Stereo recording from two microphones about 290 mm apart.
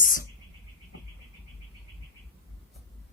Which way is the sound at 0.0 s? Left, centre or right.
Left.